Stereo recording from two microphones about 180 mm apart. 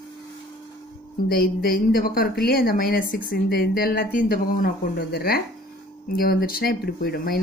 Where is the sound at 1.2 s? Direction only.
55° left (ahead or behind).